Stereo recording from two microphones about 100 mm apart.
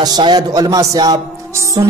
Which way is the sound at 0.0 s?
45° right (ahead or behind).